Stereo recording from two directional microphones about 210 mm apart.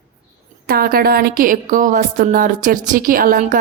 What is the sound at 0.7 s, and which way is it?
A woman's voice, 45° right (ahead or behind).